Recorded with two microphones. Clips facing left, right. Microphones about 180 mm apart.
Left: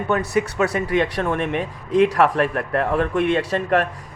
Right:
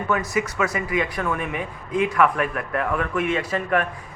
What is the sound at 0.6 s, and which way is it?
Speech, 40° left (ahead or behind).